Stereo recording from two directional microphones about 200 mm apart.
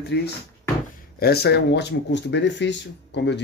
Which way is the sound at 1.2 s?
50° left (ahead or behind).